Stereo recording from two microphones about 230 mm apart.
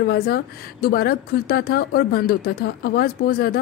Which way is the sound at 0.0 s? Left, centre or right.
Left.